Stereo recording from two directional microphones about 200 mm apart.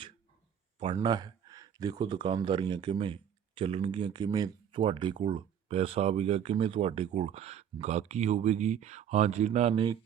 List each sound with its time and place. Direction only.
0.9 s speech: 20° right (ahead or behind)